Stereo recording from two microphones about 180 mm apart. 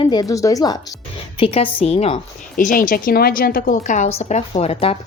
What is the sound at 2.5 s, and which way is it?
A woman's voice, 50° left (ahead or behind).